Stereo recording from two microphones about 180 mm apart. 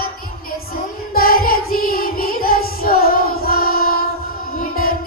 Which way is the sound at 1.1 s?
55° left (ahead or behind).